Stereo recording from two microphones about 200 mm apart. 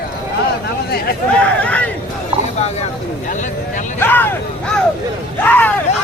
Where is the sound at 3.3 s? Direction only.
40° left (ahead or behind).